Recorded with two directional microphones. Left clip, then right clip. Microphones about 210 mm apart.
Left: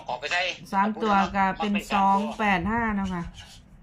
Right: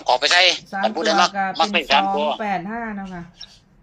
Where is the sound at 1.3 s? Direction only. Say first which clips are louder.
Right 1 dB; 10° left (ahead or behind).